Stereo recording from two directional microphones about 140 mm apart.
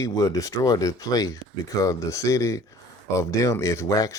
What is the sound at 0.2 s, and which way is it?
Speech, 25° left (ahead or behind).